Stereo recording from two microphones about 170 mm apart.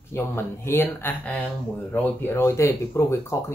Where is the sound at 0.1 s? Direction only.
15° left (ahead or behind).